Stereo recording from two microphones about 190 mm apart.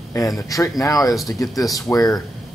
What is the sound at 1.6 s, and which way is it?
Speech, 20° left (ahead or behind).